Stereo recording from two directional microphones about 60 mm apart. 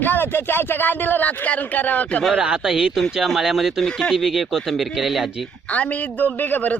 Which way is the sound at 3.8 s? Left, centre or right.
Centre.